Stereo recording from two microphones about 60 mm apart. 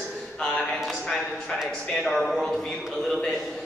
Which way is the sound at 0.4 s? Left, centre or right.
Centre.